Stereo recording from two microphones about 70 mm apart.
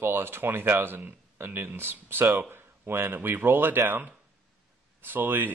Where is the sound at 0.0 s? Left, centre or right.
Right.